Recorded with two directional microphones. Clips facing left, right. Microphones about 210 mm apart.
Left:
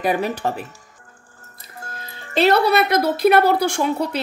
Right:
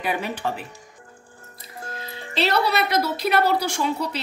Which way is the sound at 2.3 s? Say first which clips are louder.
Left 6 dB; 50° left (ahead or behind).